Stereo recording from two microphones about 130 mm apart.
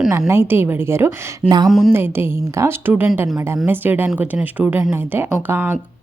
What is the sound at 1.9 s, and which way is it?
A woman's voice, 15° right (ahead or behind).